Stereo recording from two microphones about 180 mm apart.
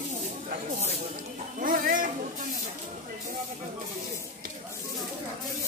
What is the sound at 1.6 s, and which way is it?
Speech, 50° right (ahead or behind).